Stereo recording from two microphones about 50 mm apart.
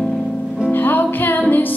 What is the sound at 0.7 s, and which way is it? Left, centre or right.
Music, left.